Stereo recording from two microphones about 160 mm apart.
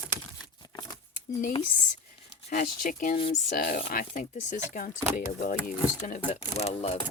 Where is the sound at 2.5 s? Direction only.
55° left (ahead or behind).